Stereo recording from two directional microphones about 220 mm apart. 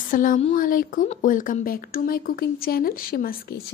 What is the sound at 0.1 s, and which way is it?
A woman's voice, 35° left (ahead or behind).